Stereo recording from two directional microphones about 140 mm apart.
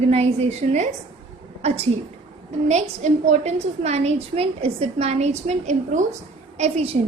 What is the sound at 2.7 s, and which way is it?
A woman's voice, 55° right (ahead or behind).